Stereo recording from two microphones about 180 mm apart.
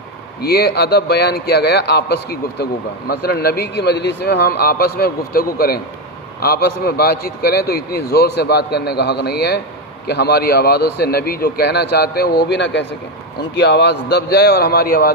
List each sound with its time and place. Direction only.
0.4 s a man's voice: 60° left (ahead or behind)